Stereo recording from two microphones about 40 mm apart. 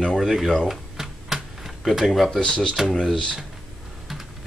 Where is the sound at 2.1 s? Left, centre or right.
Centre.